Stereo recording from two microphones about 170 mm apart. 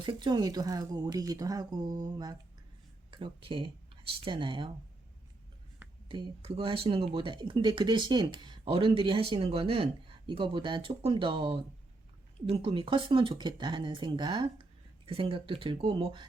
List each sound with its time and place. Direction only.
0.0 s speech: 25° right (ahead or behind)
6.1 s speech: 30° right (ahead or behind)